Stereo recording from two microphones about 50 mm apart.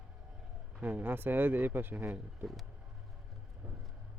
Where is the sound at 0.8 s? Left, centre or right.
Right.